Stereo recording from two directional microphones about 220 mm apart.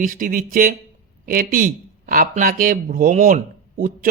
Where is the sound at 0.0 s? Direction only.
35° right (ahead or behind).